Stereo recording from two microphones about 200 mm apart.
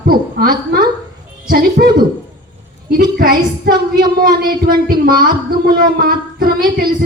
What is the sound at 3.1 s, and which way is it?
Speech, 45° right (ahead or behind).